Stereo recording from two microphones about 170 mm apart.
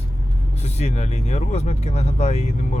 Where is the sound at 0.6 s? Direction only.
40° left (ahead or behind).